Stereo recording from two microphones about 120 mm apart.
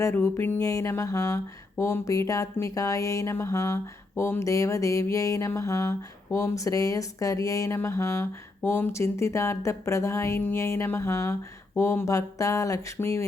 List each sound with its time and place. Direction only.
0.0 s speech: 25° left (ahead or behind)